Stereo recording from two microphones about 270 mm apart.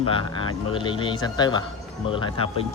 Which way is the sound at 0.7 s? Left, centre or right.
Centre.